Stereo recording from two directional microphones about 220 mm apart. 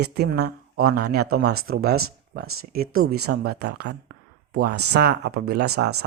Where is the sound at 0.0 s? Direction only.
45° right (ahead or behind).